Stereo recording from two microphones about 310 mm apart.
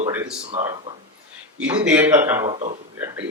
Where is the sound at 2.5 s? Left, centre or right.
Right.